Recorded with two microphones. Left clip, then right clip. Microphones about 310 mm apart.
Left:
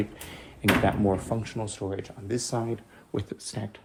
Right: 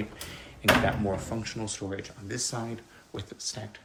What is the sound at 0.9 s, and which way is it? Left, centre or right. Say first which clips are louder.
Speech: left 4 dB; centre.